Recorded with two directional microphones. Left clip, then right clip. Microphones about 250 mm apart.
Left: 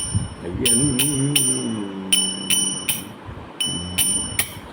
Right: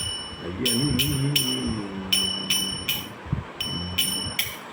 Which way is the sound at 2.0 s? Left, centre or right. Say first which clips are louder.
Left 2 dB; left.